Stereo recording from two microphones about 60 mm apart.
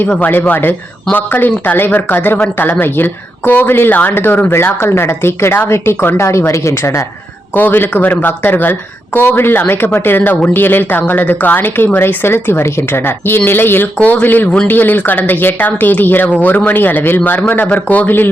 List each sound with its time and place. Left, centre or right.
0.2 s speech: left
7.5 s speech: left